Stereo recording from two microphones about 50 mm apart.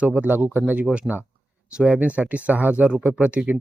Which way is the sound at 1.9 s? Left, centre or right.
Right.